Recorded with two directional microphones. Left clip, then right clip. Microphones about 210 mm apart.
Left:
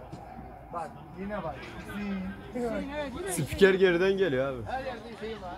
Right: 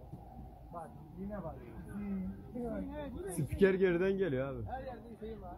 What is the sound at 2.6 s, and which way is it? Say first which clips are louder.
Speech: left 9 dB; 40° right (ahead or behind).